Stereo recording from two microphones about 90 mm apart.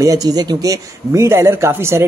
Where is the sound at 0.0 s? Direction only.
40° right (ahead or behind).